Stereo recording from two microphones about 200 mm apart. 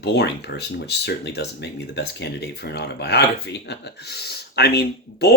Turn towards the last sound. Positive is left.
turn(degrees=55)  # may be behind; listen again after turning